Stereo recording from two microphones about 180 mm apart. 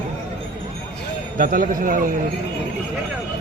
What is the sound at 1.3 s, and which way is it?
Speech, 50° right (ahead or behind).